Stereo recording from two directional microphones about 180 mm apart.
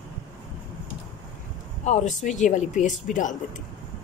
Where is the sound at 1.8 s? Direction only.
40° left (ahead or behind).